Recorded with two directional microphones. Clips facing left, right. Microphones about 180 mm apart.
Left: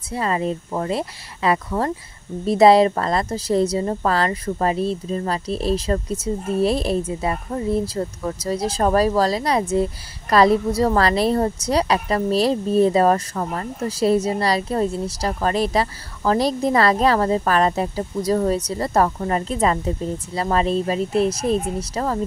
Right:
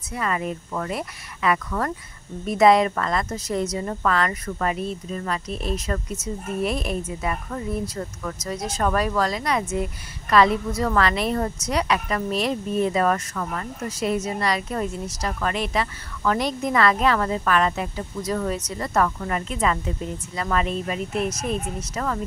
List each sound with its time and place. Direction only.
0.1 s a woman's voice: 30° left (ahead or behind)